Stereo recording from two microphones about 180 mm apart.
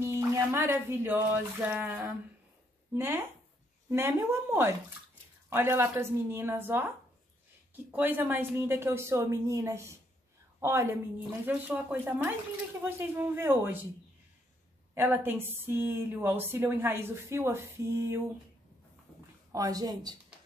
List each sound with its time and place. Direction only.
0.0 s speech: 15° right (ahead or behind)
3.9 s a woman's voice: 15° right (ahead or behind)
15.0 s a woman's voice: 10° right (ahead or behind)
19.5 s speech: 20° right (ahead or behind)